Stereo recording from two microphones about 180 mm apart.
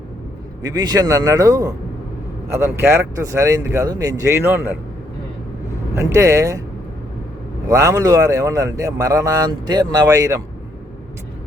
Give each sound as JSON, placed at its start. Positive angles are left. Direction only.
{"t": 0.6, "sound": "speech", "side_deg": -20}
{"t": 5.9, "sound": "speech", "side_deg": -15}
{"t": 7.7, "sound": "speech", "side_deg": -15}